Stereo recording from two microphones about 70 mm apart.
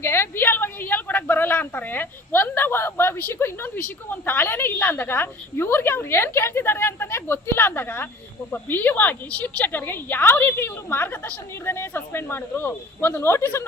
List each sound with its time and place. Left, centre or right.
0.0 s a woman's voice: left